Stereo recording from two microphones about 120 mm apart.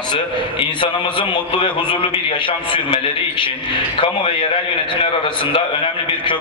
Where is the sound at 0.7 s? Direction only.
45° left (ahead or behind).